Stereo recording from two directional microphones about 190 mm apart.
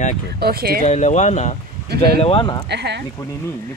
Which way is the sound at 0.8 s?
40° left (ahead or behind).